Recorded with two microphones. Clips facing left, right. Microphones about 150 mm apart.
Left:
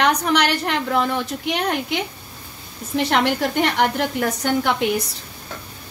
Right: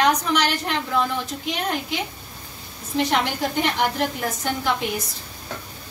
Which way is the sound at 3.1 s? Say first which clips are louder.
Left 4 dB; 65° left (ahead or behind).